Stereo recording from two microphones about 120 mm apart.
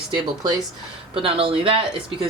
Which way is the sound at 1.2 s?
50° right (ahead or behind).